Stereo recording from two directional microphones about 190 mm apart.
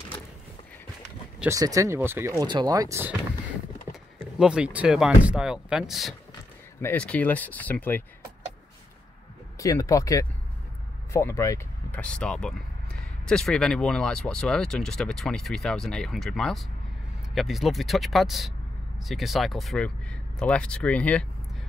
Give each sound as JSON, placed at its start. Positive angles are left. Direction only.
{"t": 1.5, "sound": "speech", "side_deg": -15}
{"t": 9.6, "sound": "speech", "side_deg": 15}